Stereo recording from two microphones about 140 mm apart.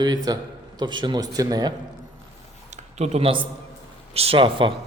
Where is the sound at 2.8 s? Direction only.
55° right (ahead or behind).